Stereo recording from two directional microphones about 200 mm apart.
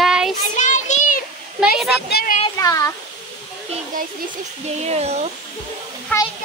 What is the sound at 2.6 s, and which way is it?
Speech, 15° left (ahead or behind).